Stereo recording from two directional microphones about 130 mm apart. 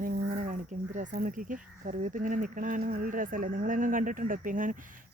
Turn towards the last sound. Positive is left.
turn(degrees=-90)